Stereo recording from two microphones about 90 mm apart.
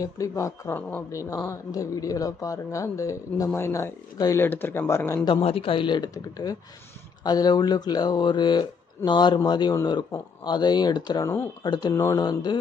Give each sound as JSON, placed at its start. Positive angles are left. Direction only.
{"t": 0.0, "sound": "speech", "side_deg": 35}
{"t": 0.7, "sound": "a woman's voice", "side_deg": 15}
{"t": 1.1, "sound": "speech", "side_deg": 35}
{"t": 5.2, "sound": "speech", "side_deg": 80}